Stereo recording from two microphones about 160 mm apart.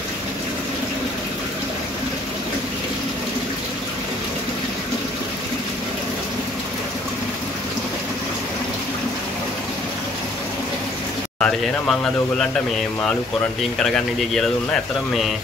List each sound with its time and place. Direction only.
11.3 s speech: 5° left (ahead or behind)
13.8 s speech: 5° left (ahead or behind)